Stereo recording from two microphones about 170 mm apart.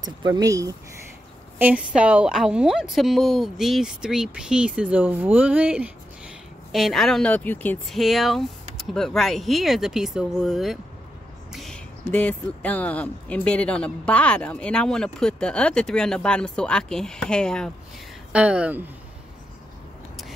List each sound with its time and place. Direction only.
0.0 s speech: 20° right (ahead or behind)
1.6 s a woman's voice: 10° right (ahead or behind)
11.5 s a sound: centre (ahead or behind)
12.1 s a woman's voice: 10° left (ahead or behind)
18.3 s speech: 5° right (ahead or behind)